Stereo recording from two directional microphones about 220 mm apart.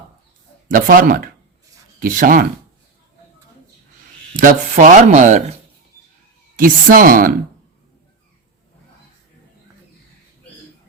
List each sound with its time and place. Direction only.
0.7 s speech: 40° right (ahead or behind)
4.4 s speech: 35° right (ahead or behind)
6.6 s speech: 40° right (ahead or behind)